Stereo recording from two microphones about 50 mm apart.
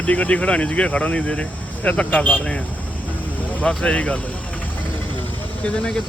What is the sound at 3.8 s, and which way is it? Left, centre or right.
Speech, left.